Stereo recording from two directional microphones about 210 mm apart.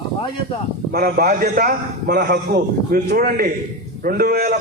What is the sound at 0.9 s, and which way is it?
A man's voice, 45° right (ahead or behind).